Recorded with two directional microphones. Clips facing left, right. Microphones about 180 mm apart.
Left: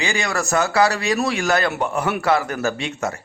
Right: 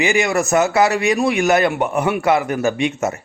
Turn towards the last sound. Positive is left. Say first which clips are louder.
# right 5 dB
turn(degrees=-20)  # may be behind; listen again after turning